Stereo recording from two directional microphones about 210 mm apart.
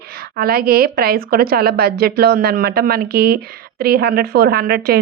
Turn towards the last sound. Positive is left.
turn(degrees=-50)  # may be behind; listen again after turning